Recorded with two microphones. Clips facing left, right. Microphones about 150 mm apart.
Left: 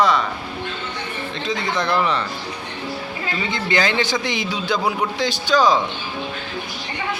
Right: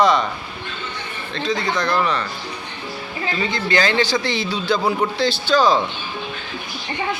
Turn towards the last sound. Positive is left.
turn(degrees=15)  # may be behind; listen again after turning